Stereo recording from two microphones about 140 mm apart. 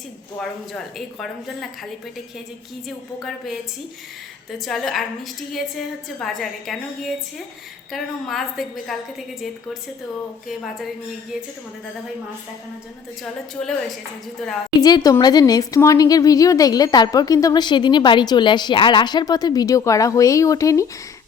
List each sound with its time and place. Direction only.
0.3 s a woman's voice: centre (ahead or behind)
3.2 s a woman's voice: centre (ahead or behind)
14.8 s a woman's voice: 30° left (ahead or behind)